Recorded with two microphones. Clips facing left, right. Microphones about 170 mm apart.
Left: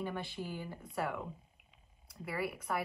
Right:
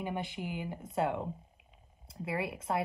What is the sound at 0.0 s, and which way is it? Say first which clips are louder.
Speech: right 3 dB; 15° right (ahead or behind).